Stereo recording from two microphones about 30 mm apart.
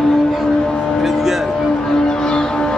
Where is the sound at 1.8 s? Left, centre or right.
Left.